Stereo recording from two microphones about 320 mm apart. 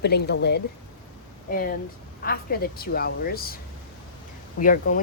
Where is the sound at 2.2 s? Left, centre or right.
Left.